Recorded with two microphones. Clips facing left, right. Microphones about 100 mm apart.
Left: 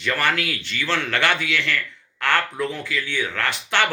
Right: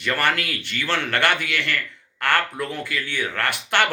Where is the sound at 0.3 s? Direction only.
50° right (ahead or behind).